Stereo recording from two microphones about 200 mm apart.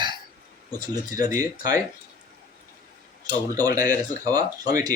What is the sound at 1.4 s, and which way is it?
Speech, 15° right (ahead or behind).